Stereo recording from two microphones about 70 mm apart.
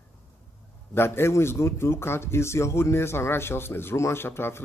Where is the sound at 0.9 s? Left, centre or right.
Left.